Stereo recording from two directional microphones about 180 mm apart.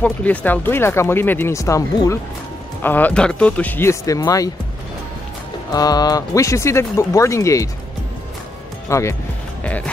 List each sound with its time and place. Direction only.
0.0 s speech: 10° left (ahead or behind)
5.7 s speech: 20° left (ahead or behind)
8.8 s speech: 15° left (ahead or behind)